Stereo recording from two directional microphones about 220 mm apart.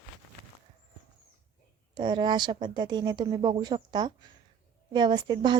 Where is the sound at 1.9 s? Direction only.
20° right (ahead or behind).